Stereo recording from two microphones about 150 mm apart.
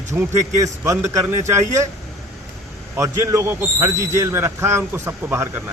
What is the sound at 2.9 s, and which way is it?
A man's voice, 20° right (ahead or behind).